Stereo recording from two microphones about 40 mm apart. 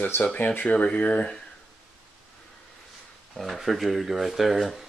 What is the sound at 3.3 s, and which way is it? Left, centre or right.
Speech, centre.